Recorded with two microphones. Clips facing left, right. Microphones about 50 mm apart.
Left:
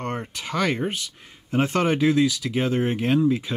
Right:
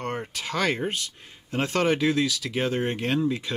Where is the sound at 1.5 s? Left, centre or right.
Centre.